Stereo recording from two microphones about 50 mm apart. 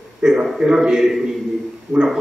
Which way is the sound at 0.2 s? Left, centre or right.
Centre.